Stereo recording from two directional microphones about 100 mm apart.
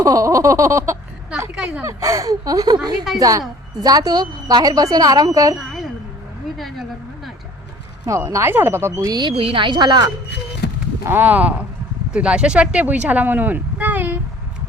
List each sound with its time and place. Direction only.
0.0 s a woman's voice: 35° right (ahead or behind)
1.5 s speech: 10° right (ahead or behind)
1.8 s a woman's voice: 30° right (ahead or behind)
5.5 s a woman's voice: centre (ahead or behind)
8.0 s speech: 30° right (ahead or behind)
9.3 s speech: 70° right (ahead or behind); by 10.1 s 45° right (ahead or behind)
11.0 s speech: 20° right (ahead or behind)